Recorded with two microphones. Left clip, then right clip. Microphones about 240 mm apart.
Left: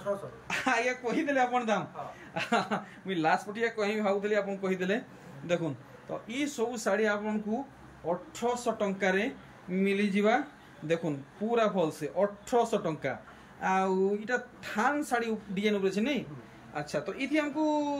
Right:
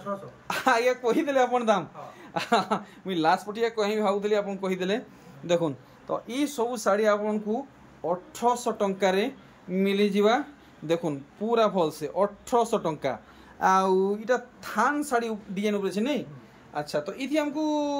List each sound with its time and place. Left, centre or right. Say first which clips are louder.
0.5 s speech: right 6 dB; centre
8.4 s speech: right 6 dB; centre